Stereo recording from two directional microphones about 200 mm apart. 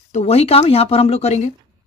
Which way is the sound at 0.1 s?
30° left (ahead or behind).